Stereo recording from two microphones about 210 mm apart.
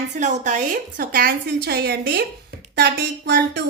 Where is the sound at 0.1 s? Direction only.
35° right (ahead or behind).